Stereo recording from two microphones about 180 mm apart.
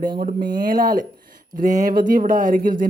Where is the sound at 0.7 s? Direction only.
50° right (ahead or behind).